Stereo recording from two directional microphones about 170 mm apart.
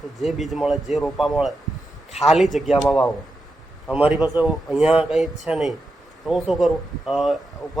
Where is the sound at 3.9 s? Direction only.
10° right (ahead or behind).